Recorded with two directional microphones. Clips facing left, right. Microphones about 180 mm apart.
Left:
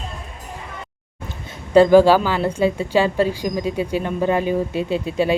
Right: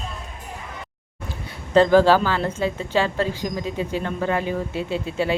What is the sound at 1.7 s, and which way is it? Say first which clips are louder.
A woman's voice: left 4 dB; 10° left (ahead or behind).